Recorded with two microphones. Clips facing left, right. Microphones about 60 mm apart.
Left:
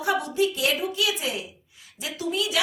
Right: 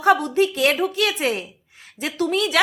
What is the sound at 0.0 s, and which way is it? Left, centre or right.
A woman's voice, right.